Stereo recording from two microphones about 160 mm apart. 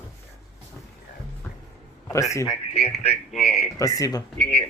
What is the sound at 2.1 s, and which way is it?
Speech, 20° left (ahead or behind).